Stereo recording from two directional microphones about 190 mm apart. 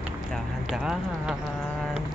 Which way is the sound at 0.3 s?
Centre (ahead or behind).